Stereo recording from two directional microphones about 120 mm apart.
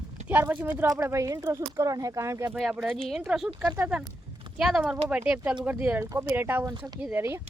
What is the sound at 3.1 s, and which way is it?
Speech, centre (ahead or behind).